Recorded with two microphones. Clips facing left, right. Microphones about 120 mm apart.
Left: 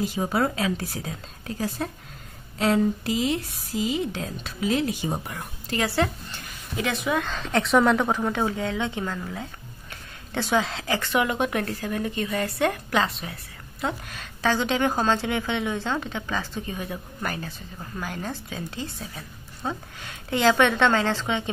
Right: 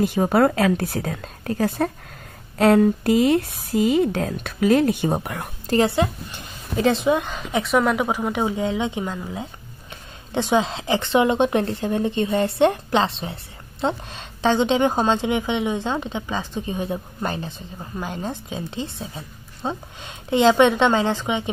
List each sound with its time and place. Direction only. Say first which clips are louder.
0.0 s speech: right 7 dB; 60° right (ahead or behind)
5.9 s a woman's voice: right 3 dB; 20° right (ahead or behind)
7.3 s a woman's voice: even; 10° right (ahead or behind)